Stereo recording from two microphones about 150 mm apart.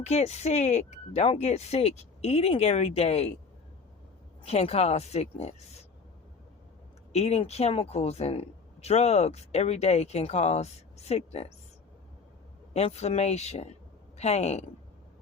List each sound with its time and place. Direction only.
0.0 s speech: 45° left (ahead or behind)
4.4 s speech: 45° left (ahead or behind)
7.1 s speech: 45° left (ahead or behind)
12.7 s speech: 45° left (ahead or behind)